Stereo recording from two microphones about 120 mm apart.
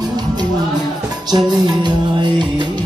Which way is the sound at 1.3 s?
35° right (ahead or behind).